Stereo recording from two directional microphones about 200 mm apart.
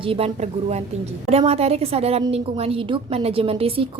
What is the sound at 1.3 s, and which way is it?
A woman's voice, 30° right (ahead or behind).